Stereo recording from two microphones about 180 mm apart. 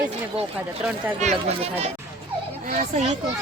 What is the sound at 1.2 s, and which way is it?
Speech, 35° right (ahead or behind).